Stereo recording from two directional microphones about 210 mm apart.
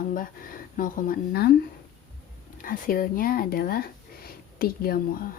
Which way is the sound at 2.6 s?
45° left (ahead or behind).